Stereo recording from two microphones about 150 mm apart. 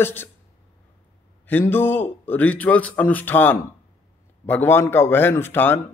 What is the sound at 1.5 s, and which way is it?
Speech, 15° left (ahead or behind).